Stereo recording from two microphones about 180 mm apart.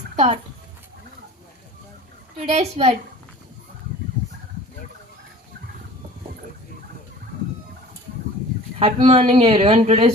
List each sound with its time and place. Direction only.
2.5 s speech: 35° right (ahead or behind)
8.8 s speech: 30° right (ahead or behind)